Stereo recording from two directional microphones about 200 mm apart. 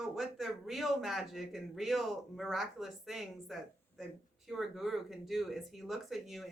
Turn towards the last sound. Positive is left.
turn(degrees=0)  # may be behind; listen again after turning